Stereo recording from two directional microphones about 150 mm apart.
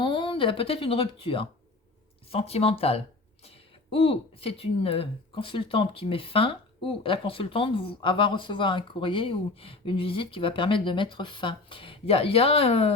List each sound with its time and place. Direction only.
0.0 s speech: 35° left (ahead or behind)